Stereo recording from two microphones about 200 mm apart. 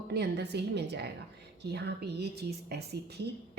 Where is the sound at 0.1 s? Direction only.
55° right (ahead or behind).